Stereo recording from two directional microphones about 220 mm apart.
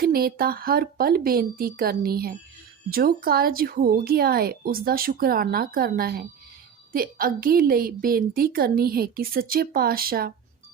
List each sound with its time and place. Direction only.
0.0 s a woman's voice: 45° right (ahead or behind)